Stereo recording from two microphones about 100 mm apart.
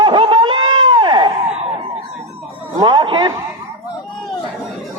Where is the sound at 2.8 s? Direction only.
50° right (ahead or behind).